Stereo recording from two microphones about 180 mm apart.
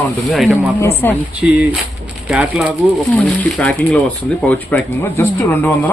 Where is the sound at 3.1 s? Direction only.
5° left (ahead or behind).